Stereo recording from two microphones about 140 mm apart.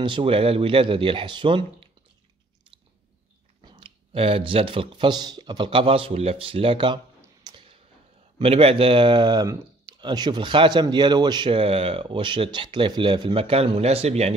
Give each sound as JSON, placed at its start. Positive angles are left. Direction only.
{"t": 0.0, "sound": "speech", "side_deg": -40}
{"t": 3.6, "sound": "speech", "side_deg": -35}
{"t": 7.4, "sound": "a sound", "side_deg": -40}
{"t": 8.4, "sound": "speech", "side_deg": -45}